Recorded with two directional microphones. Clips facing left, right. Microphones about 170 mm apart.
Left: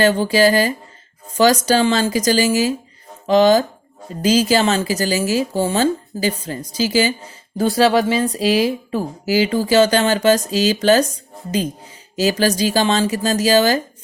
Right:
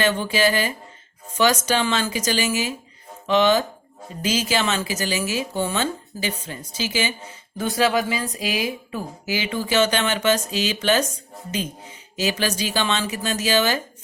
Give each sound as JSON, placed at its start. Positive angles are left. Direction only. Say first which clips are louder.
{"t": 0.0, "sound": "speech", "louder": "left 6 dB", "side_deg": 35}
{"t": 12.1, "sound": "speech", "louder": "left 7 dB", "side_deg": 40}